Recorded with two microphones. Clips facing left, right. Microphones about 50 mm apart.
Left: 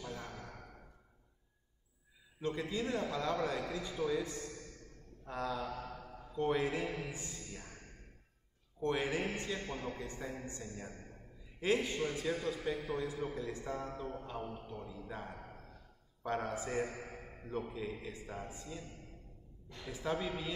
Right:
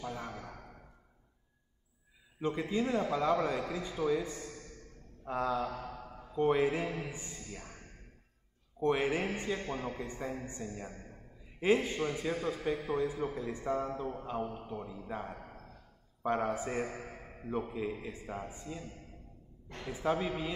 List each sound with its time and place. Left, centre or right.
0.0 s a sound: right
2.4 s a man's voice: right
5.6 s mantra: centre
6.3 s a man's voice: right
7.4 s speech: centre
8.8 s a man's voice: right
10.6 s a man's voice: centre
11.6 s a man's voice: right
17.0 s a sound: centre
17.5 s a man's voice: right
19.9 s a man's voice: right